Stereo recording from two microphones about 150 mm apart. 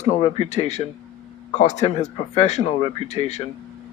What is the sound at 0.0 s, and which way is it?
A man's voice, 45° left (ahead or behind).